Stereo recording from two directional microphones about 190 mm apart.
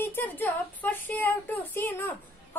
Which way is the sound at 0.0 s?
10° left (ahead or behind).